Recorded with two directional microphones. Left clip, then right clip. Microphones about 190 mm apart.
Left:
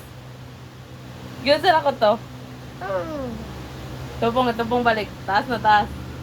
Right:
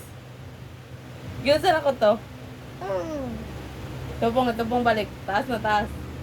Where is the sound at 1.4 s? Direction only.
30° right (ahead or behind).